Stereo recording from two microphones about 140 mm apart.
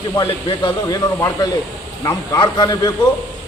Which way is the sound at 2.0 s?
25° left (ahead or behind).